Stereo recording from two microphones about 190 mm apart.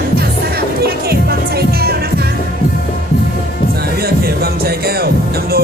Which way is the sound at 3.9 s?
55° right (ahead or behind).